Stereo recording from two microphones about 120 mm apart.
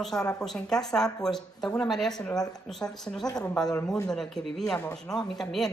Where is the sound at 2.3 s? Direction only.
30° left (ahead or behind).